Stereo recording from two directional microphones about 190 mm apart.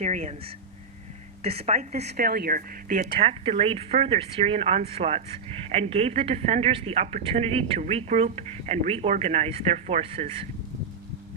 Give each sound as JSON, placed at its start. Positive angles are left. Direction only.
{"t": 0.0, "sound": "speech", "side_deg": -35}
{"t": 1.4, "sound": "a woman's voice", "side_deg": -30}
{"t": 3.2, "sound": "speech", "side_deg": -30}